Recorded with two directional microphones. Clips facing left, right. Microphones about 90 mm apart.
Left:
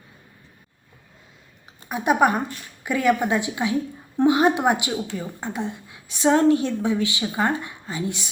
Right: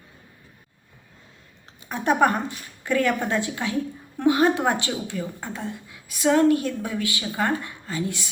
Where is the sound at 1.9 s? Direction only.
15° left (ahead or behind).